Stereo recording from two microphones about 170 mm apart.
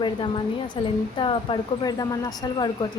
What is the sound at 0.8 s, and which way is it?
A woman's voice, 30° left (ahead or behind).